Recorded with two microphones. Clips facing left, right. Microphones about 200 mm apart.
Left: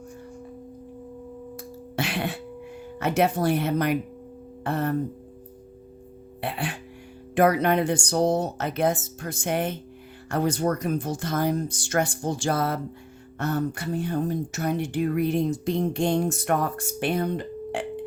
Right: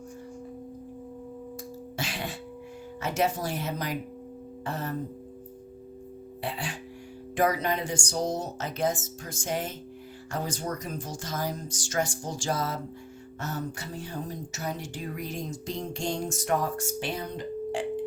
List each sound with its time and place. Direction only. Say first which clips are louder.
2.0 s speech: left 7 dB; 60° left (ahead or behind)
6.4 s speech: left 4 dB; 60° left (ahead or behind)